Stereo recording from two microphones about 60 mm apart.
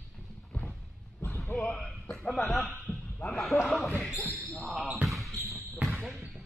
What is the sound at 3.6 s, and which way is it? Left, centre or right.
Basketball bounce, centre.